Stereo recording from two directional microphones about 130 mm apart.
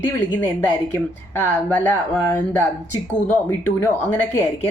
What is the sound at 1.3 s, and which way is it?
A woman's voice, 15° left (ahead or behind).